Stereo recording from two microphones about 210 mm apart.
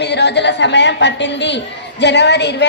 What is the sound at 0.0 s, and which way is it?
A woman's voice, 55° left (ahead or behind).